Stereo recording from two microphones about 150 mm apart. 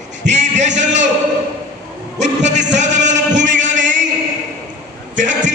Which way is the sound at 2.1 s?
50° right (ahead or behind).